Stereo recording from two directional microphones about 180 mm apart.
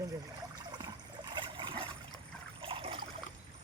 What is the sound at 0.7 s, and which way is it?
Trickle, 25° right (ahead or behind).